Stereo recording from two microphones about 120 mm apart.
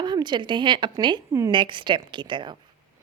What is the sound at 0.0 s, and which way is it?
A woman's voice, 40° right (ahead or behind).